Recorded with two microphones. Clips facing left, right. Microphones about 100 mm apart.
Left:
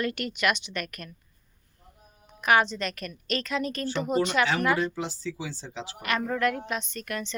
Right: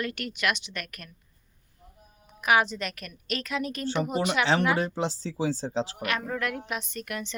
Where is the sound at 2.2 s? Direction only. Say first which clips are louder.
Left 1 dB; 5° right (ahead or behind).